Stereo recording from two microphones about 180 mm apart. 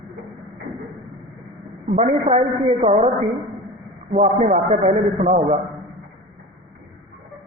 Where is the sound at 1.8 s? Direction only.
40° right (ahead or behind).